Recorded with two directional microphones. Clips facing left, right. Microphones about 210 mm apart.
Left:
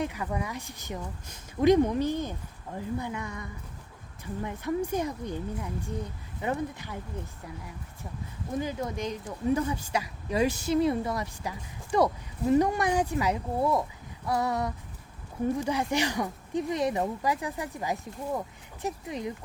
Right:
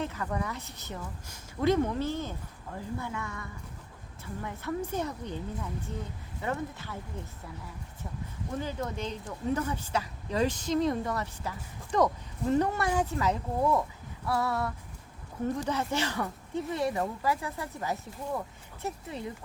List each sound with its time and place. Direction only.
0.0 s a woman's voice: 15° left (ahead or behind)
8.5 s a woman's voice: 10° left (ahead or behind)